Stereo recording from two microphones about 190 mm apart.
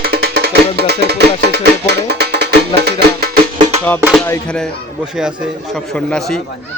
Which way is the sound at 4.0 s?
5° right (ahead or behind).